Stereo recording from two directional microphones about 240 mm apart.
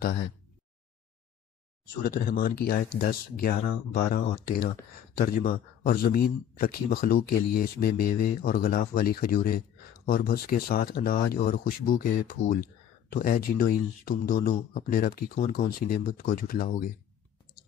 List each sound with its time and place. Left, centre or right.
2.0 s speech: left